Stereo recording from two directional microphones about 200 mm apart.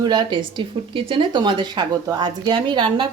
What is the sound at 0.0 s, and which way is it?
Speech, 20° right (ahead or behind).